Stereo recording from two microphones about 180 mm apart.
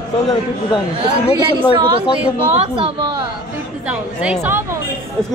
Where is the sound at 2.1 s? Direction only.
5° right (ahead or behind).